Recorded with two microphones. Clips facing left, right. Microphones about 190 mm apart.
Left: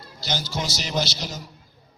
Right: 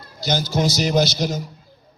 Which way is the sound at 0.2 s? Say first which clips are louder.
Right 8 dB; 45° right (ahead or behind).